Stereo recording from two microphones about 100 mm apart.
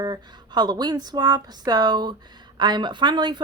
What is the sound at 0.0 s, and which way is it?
Speech, 45° right (ahead or behind).